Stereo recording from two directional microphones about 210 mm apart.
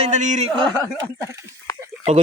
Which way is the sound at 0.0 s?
35° right (ahead or behind).